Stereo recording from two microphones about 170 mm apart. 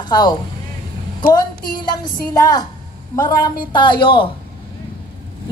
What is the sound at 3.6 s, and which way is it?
Speech, 25° left (ahead or behind).